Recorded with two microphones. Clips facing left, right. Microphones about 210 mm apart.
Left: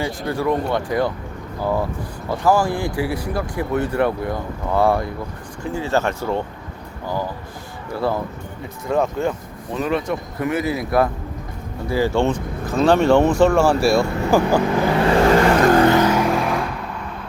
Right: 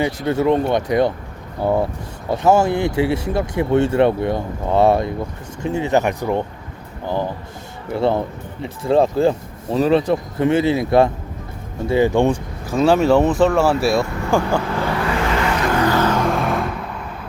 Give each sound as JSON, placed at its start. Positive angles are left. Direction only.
{"t": 0.0, "sound": "speech", "side_deg": -20}
{"t": 7.9, "sound": "speech", "side_deg": -25}
{"t": 14.4, "sound": "speech", "side_deg": 15}
{"t": 15.3, "sound": "vehicle", "side_deg": 40}
{"t": 15.8, "sound": "vehicle", "side_deg": 20}
{"t": 16.0, "sound": "vehicle", "side_deg": 5}